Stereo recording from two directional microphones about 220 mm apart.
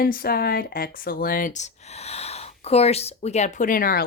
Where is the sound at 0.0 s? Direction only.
45° left (ahead or behind).